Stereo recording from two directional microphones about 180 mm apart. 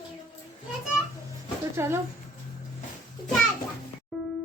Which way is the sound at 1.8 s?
15° right (ahead or behind).